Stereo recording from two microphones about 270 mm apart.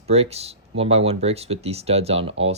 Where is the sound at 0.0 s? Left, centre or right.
Right.